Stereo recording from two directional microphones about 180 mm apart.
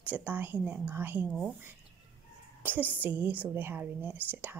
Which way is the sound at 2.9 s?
10° right (ahead or behind).